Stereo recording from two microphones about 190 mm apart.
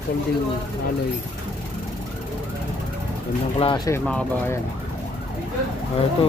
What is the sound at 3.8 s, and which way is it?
Speech, 10° left (ahead or behind).